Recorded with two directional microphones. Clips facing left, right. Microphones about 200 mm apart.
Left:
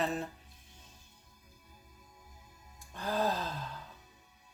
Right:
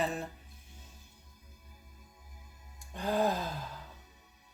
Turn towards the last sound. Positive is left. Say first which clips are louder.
# right 2 dB
turn(degrees=-15)  # may be behind; listen again after turning